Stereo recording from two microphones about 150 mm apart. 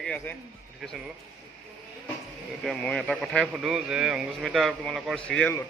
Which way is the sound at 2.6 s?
5° left (ahead or behind).